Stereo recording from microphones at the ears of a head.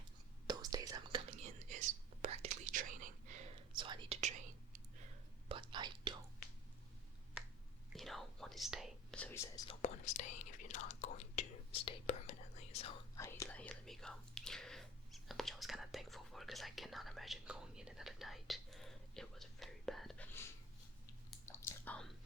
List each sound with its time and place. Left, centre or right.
0.6 s whispering: right
7.9 s whispering: centre
9.3 s whispering: left
13.8 s whispering: centre
21.1 s chewing: left